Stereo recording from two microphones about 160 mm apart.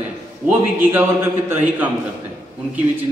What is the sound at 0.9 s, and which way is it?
Speech, 15° right (ahead or behind).